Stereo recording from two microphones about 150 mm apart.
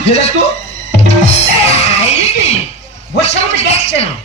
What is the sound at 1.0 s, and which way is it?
Music, 45° left (ahead or behind).